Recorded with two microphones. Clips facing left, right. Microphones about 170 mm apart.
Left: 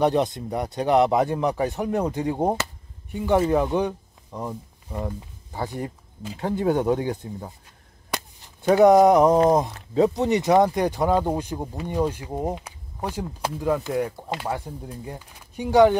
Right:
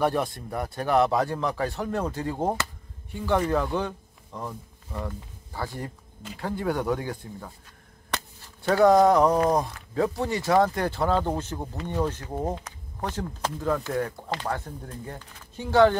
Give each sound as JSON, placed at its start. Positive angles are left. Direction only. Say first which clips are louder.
{"t": 0.0, "sound": "speech", "louder": "left 4 dB", "side_deg": 20}